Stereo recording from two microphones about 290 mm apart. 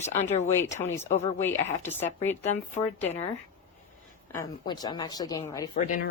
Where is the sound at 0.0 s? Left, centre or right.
Left.